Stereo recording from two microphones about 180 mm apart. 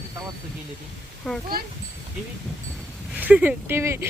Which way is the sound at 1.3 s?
5° left (ahead or behind).